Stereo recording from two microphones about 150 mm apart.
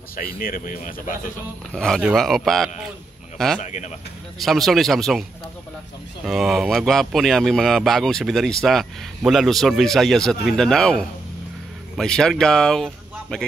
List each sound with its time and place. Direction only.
0.1 s speech: 75° left (ahead or behind)
1.7 s speech: 5° left (ahead or behind)
3.6 s speech: 50° left (ahead or behind)
4.4 s speech: centre (ahead or behind)
6.2 s speech: centre (ahead or behind)